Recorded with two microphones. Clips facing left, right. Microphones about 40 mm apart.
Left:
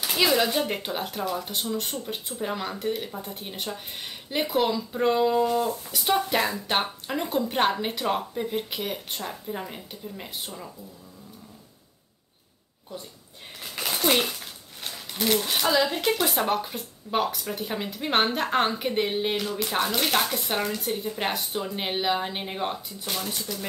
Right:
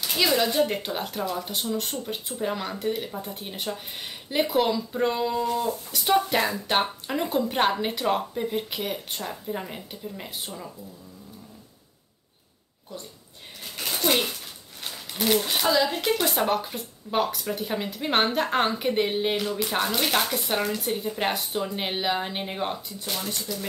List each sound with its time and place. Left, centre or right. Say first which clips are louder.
0.1 s speech: left 1 dB; centre
14.0 s speech: left 1 dB; centre
14.8 s a sound: even; centre
15.7 s speech: even; centre